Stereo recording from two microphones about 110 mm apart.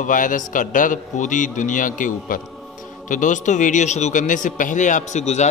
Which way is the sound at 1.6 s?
90° left.